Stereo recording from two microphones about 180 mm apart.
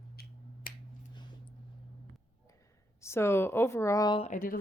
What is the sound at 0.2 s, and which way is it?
Finger snapping, 55° left (ahead or behind).